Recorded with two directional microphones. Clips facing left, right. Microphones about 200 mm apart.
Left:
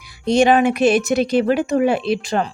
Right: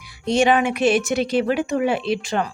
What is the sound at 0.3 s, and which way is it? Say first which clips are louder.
A woman's voice: left 4 dB; 40° left (ahead or behind).